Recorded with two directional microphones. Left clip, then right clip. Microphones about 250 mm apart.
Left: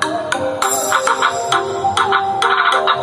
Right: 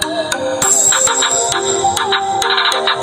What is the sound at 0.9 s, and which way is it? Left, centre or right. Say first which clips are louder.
Music: even; right.